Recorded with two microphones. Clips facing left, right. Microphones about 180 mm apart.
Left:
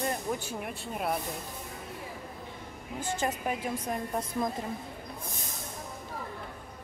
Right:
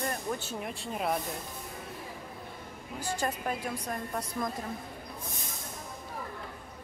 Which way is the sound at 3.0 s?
20° left (ahead or behind).